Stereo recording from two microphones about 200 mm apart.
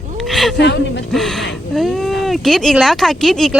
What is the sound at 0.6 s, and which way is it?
Speech, 60° left (ahead or behind).